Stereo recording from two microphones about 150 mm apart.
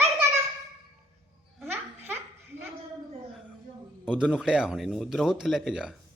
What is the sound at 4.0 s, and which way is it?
A man's voice, 5° right (ahead or behind).